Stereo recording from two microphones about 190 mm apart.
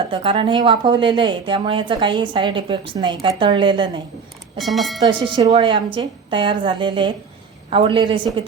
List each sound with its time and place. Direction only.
0.1 s a woman's voice: 25° right (ahead or behind)
4.5 s speech: centre (ahead or behind)
5.0 s a woman's voice: 20° right (ahead or behind)